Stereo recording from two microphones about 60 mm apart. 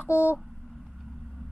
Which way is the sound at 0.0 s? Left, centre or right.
Left.